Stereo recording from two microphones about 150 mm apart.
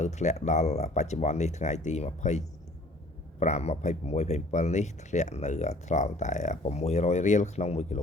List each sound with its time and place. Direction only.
0.0 s speech: 50° left (ahead or behind)
3.4 s speech: 50° left (ahead or behind)